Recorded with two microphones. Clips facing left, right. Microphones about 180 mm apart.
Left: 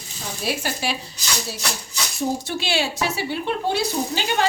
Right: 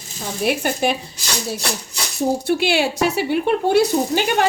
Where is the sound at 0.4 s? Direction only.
55° right (ahead or behind).